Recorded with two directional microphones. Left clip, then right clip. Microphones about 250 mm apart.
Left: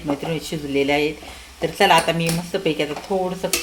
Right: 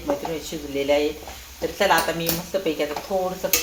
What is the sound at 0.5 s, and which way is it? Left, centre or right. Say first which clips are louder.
Speech: left 4 dB; left.